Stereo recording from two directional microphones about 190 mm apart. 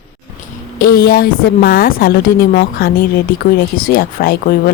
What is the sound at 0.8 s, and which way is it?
A woman's voice, 50° left (ahead or behind).